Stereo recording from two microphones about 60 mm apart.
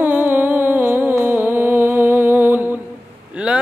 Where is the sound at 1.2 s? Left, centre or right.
Right.